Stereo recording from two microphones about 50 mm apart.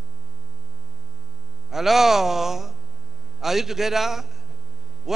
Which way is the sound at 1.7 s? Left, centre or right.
Centre.